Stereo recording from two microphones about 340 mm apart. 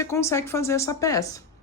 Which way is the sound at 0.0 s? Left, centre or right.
Centre.